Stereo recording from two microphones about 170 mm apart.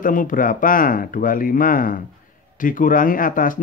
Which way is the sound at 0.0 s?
50° left (ahead or behind).